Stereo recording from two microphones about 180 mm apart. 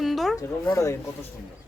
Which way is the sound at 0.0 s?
Centre (ahead or behind).